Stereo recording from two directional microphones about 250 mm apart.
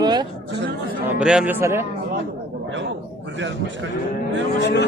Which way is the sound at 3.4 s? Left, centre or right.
Right.